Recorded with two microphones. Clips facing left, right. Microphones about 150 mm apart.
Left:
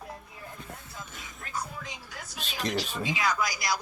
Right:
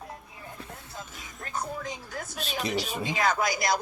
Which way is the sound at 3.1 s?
50° right (ahead or behind).